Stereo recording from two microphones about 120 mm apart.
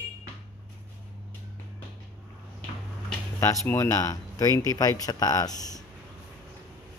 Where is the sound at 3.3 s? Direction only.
20° left (ahead or behind).